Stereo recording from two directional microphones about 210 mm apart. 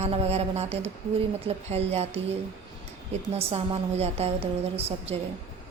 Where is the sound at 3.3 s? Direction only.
30° right (ahead or behind).